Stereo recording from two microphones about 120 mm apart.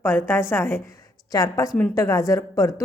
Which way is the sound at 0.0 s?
20° left (ahead or behind).